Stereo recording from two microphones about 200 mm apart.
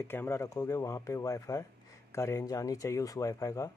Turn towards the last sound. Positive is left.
turn(degrees=15)  # may be behind; listen again after turning